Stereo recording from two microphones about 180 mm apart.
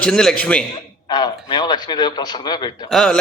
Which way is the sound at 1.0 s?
25° left (ahead or behind).